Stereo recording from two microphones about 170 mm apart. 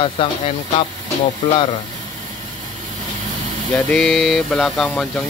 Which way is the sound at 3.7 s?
5° left (ahead or behind).